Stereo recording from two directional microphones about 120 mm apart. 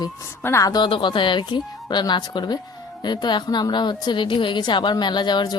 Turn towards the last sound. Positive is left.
turn(degrees=40)  # may be behind; listen again after turning